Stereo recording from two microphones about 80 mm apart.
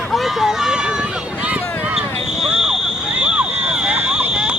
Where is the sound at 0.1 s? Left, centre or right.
Centre.